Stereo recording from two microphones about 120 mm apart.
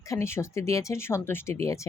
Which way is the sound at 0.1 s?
20° left (ahead or behind).